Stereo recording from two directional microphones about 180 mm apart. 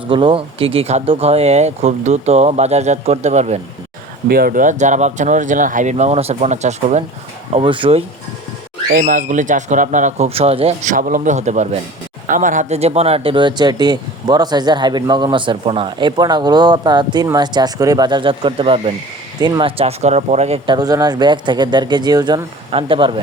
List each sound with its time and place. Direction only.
0.1 s speech: 30° right (ahead or behind)
4.3 s speech: 55° right (ahead or behind)
7.5 s speech: 30° right (ahead or behind)
8.9 s speech: 50° right (ahead or behind)
20.7 s speech: 20° right (ahead or behind)